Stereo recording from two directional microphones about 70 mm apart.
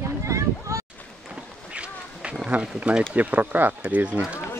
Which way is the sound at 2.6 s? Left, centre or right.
Centre.